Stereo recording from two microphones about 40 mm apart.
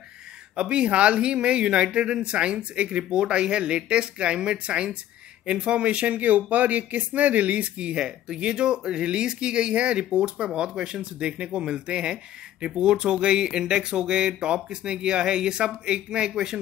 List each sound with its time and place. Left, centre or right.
0.6 s speech: right